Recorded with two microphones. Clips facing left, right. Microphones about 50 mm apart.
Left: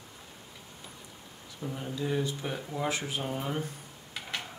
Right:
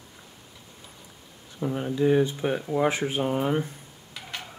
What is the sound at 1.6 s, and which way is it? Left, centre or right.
Speech, right.